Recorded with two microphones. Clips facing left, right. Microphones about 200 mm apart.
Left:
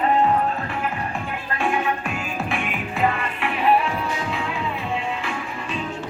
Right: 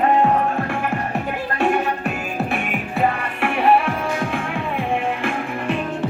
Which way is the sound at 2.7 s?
50° right (ahead or behind).